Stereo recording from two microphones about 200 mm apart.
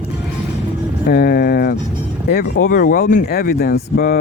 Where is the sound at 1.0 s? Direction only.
50° left (ahead or behind).